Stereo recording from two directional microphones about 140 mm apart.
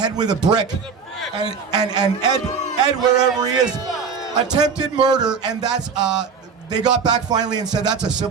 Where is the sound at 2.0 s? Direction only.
30° right (ahead or behind).